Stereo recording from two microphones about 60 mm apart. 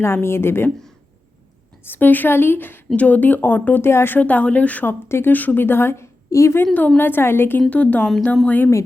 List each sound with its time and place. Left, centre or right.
0.0 s speech: left
1.9 s speech: left
2.9 s speech: left
4.2 s speech: left
4.9 s speech: left
5.3 s speech: left
6.3 s a woman's voice: left
6.7 s speech: left
7.7 s speech: left
8.4 s speech: left